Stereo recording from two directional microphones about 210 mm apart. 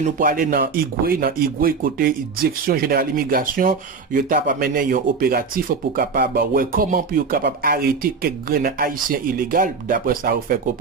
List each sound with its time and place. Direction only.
0.0 s speech: 40° right (ahead or behind)